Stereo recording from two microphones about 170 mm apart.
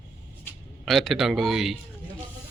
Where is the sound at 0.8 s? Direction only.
Centre (ahead or behind).